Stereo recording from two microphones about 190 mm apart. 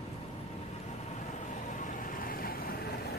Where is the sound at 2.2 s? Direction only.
50° left (ahead or behind).